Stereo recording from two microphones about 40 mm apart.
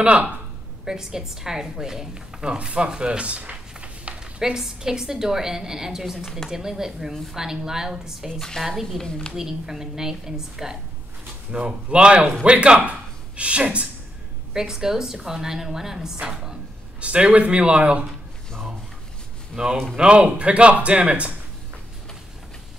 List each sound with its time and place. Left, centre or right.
0.0 s speech: right
0.8 s a woman's voice: centre; by 4.1 s right
4.2 s a woman's voice: centre
8.3 s a woman's voice: centre
9.3 s a woman's voice: centre
11.5 s speech: right
14.5 s a woman's voice: centre
17.0 s speech: right
19.5 s speech: right